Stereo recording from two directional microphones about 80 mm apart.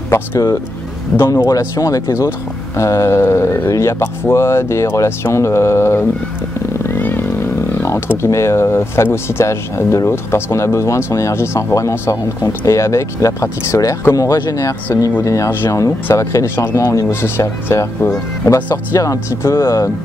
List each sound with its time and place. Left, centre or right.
0.1 s speech: left
1.3 s speech: left
6.9 s a sound: left
8.2 s speech: left